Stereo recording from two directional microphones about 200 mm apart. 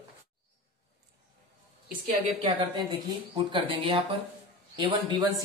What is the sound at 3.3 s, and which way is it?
A woman's voice, 25° right (ahead or behind).